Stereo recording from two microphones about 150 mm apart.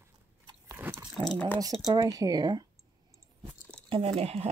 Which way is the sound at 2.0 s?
25° right (ahead or behind).